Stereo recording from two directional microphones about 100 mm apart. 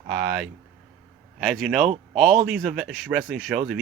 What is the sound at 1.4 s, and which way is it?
A man's voice, 5° right (ahead or behind).